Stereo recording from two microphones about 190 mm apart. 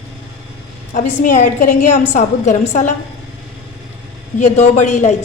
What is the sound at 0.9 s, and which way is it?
A woman's voice, 40° left (ahead or behind).